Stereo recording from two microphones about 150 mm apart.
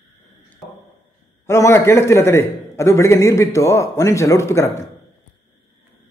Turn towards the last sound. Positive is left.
turn(degrees=20)  # may be behind; listen again after turning